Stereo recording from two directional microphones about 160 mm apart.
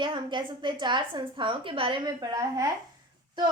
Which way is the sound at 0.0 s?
30° right (ahead or behind).